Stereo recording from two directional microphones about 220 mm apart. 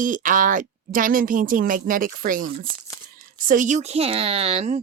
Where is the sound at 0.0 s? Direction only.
35° right (ahead or behind).